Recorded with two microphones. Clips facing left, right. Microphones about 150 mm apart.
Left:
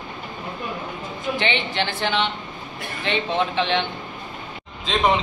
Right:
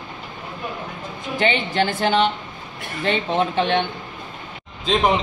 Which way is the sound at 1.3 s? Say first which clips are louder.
Right 6 dB; 45° right (ahead or behind).